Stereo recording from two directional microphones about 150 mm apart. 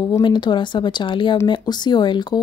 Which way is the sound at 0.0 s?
30° left (ahead or behind).